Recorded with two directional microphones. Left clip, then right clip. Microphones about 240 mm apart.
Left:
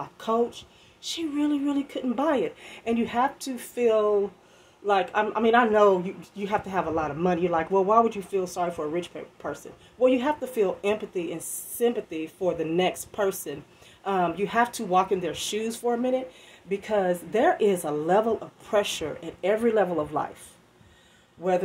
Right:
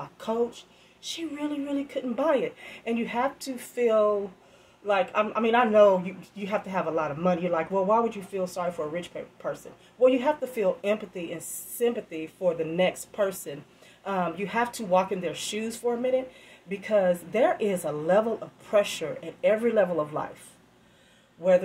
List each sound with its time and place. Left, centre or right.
1.0 s speech: left